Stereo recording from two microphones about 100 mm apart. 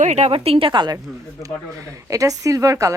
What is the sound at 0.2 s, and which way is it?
Speech, 80° right.